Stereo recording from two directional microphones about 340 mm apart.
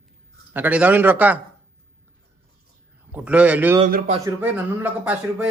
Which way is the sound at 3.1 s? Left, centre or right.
Centre.